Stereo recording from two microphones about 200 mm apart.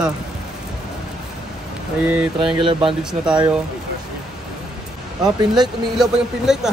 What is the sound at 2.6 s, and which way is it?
Speech, 25° right (ahead or behind).